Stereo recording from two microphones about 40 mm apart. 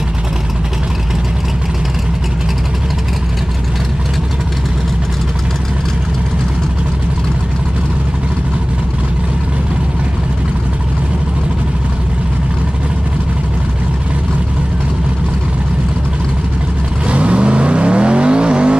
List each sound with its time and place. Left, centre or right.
17.1 s vehicle: right